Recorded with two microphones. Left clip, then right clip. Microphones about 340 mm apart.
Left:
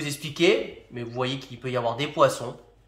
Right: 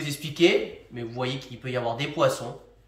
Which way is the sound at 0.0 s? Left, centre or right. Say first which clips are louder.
Right 1 dB; centre.